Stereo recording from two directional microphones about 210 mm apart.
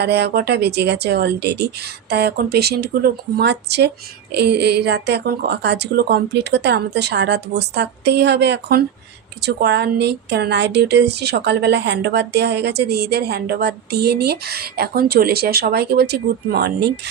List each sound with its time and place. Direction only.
0.0 s speech: 50° right (ahead or behind)